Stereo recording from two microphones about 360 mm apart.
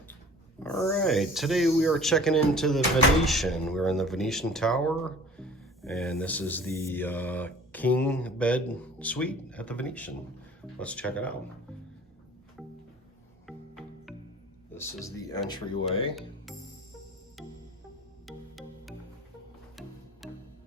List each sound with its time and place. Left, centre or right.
0.6 s speech: centre
13.7 s music: centre
14.8 s speech: centre
17.4 s music: centre